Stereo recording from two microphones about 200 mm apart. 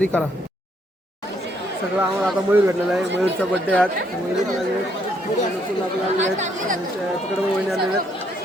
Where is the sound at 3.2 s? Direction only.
5° left (ahead or behind).